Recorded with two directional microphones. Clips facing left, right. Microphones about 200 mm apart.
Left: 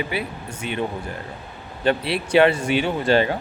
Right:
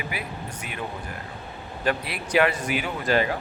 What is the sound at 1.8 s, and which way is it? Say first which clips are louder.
Speech: left 6 dB; 30° left (ahead or behind).